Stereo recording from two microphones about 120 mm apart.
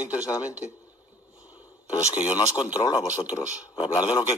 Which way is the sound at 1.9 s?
25° left (ahead or behind).